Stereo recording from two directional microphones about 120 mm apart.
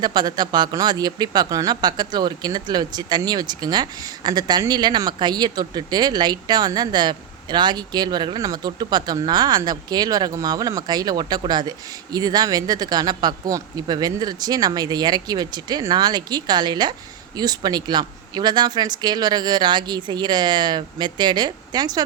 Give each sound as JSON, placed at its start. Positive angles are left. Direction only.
{"t": 0.0, "sound": "speech", "side_deg": -35}